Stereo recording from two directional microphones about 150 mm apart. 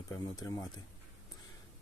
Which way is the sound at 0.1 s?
20° left (ahead or behind).